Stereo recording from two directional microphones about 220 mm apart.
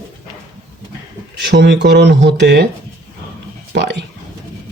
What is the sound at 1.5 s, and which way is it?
Speech, 50° right (ahead or behind).